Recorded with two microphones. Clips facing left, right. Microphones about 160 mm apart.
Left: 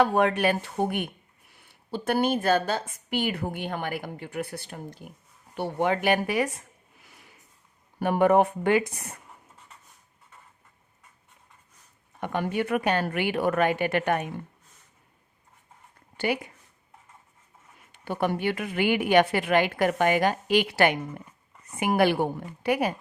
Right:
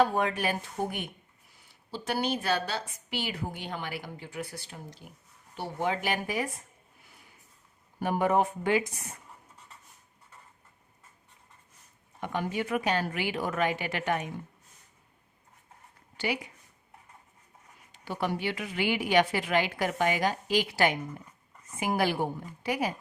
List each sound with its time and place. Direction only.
0.0 s speech: 70° left (ahead or behind)
7.0 s a sound: 90° left
7.9 s speech: 65° left (ahead or behind)
12.2 s speech: 55° left (ahead or behind)
16.1 s speech: 50° left (ahead or behind)
17.9 s speech: 55° left (ahead or behind)